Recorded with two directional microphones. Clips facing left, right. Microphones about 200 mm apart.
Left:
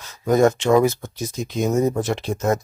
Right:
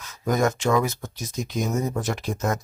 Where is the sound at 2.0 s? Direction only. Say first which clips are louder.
Left 4 dB; 25° left (ahead or behind).